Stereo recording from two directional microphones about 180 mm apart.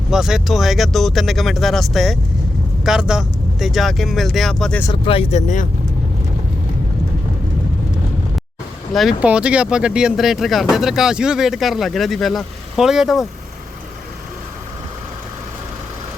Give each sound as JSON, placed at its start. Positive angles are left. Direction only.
{"t": 0.1, "sound": "speech", "side_deg": 0}
{"t": 4.9, "sound": "speech", "side_deg": 30}
{"t": 8.9, "sound": "speech", "side_deg": 0}